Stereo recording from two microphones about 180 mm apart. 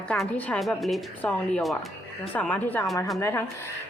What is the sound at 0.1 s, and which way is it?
A woman's voice, 10° left (ahead or behind).